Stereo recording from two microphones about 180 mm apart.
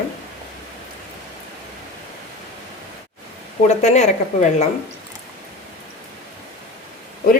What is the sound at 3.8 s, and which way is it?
Speech, 40° left (ahead or behind).